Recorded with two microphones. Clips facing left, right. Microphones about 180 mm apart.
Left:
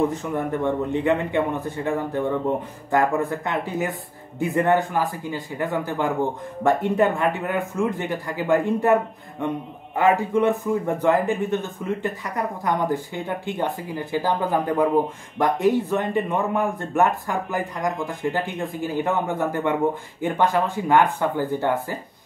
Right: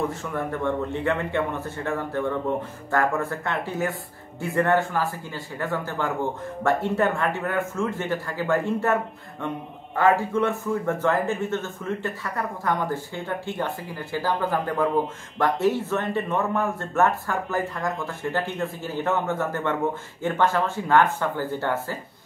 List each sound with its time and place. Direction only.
0.0 s speech: 20° left (ahead or behind)